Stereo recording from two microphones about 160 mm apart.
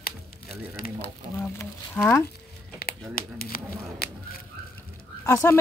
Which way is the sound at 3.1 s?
70° left (ahead or behind).